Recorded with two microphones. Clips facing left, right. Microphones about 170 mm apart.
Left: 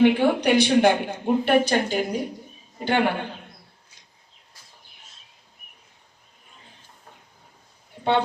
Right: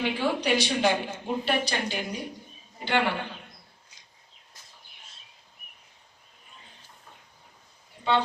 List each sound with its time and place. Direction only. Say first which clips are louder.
0.0 s a man's voice: left 9 dB; 55° left (ahead or behind)